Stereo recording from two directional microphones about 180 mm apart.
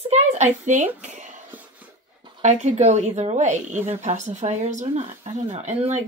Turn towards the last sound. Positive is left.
turn(degrees=-40)  # may be behind; listen again after turning